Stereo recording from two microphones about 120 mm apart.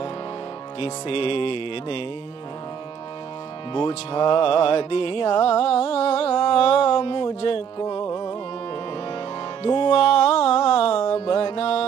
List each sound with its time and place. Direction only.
0.7 s music: 55° left (ahead or behind)
3.7 s music: 50° left (ahead or behind)
8.0 s music: 35° left (ahead or behind)
9.6 s music: 50° left (ahead or behind)